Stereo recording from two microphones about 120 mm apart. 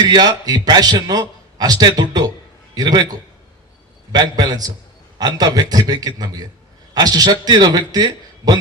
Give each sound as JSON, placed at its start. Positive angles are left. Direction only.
{"t": 0.0, "sound": "a man's voice", "side_deg": -35}
{"t": 4.1, "sound": "a man's voice", "side_deg": -35}